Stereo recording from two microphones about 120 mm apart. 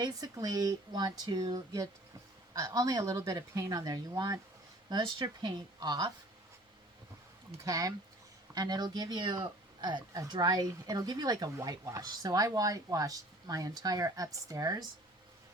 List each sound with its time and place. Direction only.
0.0 s speech: 30° right (ahead or behind)
7.6 s speech: 30° right (ahead or behind)